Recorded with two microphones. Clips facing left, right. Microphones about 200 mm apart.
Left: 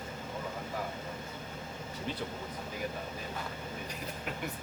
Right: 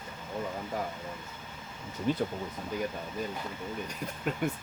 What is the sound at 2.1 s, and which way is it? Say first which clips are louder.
Speech: right 10 dB; 50° right (ahead or behind).